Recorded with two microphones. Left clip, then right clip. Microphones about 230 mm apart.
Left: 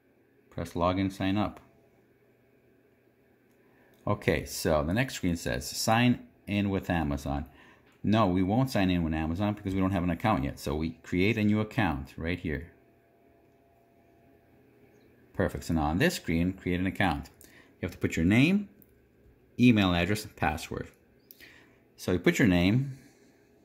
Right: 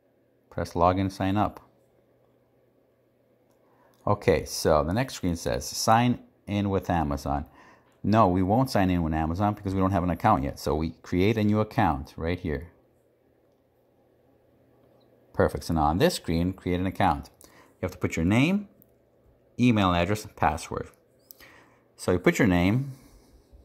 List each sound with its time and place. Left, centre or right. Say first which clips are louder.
0.5 s speech: right 6 dB; right
4.0 s speech: right 6 dB; right
15.3 s speech: right 6 dB; right
19.6 s speech: right 2 dB; centre